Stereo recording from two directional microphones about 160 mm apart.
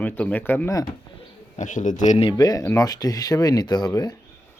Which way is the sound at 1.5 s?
50° left (ahead or behind).